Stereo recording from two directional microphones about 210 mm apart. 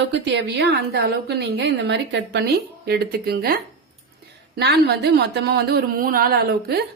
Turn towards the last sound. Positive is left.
turn(degrees=-45)  # may be behind; listen again after turning